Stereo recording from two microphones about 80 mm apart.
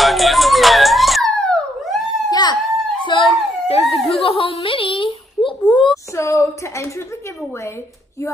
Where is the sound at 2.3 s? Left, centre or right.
Left.